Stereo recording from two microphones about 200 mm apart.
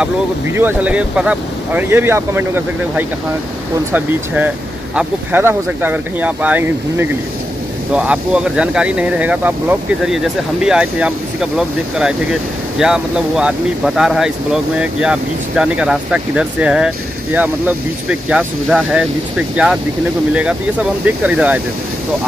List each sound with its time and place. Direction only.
0.0 s speech: 10° right (ahead or behind)
4.9 s speech: 10° right (ahead or behind)
21.0 s speech: 5° right (ahead or behind)